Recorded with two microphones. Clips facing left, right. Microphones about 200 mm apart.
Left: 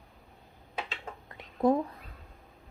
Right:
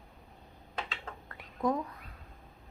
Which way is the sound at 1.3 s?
25° left (ahead or behind).